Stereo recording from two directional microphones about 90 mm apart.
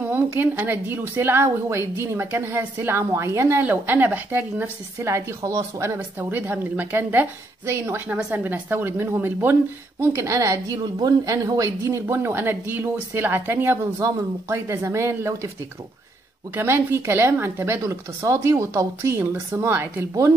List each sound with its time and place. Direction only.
0.1 s a woman's voice: 20° right (ahead or behind)
5.9 s a woman's voice: 20° right (ahead or behind); by 10.8 s 40° right (ahead or behind)
10.8 s speech: 50° right (ahead or behind)
12.1 s a woman's voice: 25° right (ahead or behind)
13.9 s speech: 35° right (ahead or behind)
16.5 s speech: 30° right (ahead or behind)